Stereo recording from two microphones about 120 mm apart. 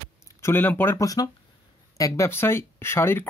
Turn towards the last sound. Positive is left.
turn(degrees=20)  # may be behind; listen again after turning